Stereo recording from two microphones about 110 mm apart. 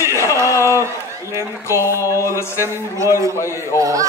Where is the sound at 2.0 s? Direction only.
25° left (ahead or behind).